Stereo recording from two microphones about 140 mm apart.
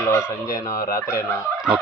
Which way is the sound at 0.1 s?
25° left (ahead or behind).